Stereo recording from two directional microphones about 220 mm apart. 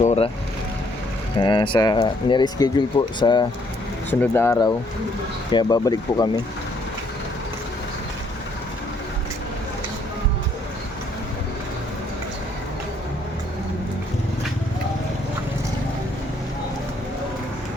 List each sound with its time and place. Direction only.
0.0 s vehicle: 30° left (ahead or behind)
1.4 s speech: 20° left (ahead or behind)